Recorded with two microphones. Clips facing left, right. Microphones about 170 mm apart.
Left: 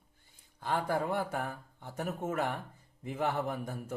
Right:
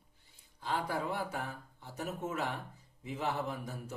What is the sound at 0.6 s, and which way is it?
Speech, 55° left (ahead or behind).